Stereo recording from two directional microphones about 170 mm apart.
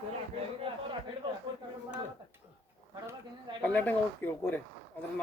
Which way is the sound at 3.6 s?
10° left (ahead or behind).